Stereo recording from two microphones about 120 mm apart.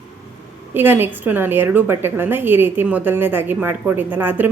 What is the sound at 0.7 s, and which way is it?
A woman's voice, 15° right (ahead or behind).